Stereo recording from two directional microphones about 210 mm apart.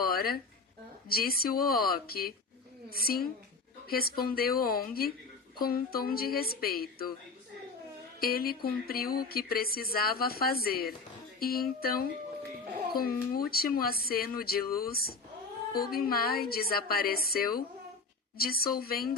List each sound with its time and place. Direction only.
0.0 s a sound: 45° left (ahead or behind)
1.0 s speech: 45° left (ahead or behind)
8.2 s speech: 45° left (ahead or behind)